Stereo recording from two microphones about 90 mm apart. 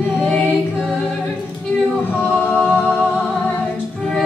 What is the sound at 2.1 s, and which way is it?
Choir, 20° left (ahead or behind).